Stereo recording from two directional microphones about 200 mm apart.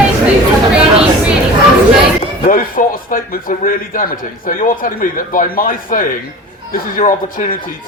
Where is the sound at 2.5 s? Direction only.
45° left (ahead or behind).